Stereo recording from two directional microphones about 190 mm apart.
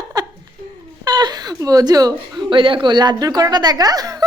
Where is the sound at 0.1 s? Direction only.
20° right (ahead or behind).